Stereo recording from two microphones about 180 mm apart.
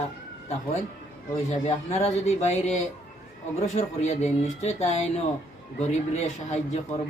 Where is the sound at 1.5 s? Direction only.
35° left (ahead or behind).